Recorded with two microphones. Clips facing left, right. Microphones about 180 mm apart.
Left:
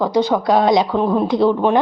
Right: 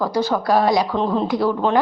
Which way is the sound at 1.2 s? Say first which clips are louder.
Left 4 dB; 25° left (ahead or behind).